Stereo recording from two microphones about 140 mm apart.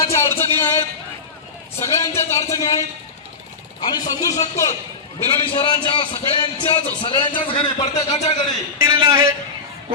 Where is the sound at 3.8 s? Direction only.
30° left (ahead or behind).